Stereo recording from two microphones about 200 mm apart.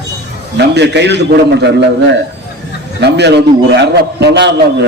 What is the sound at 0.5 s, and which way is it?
A man's voice, 60° right (ahead or behind).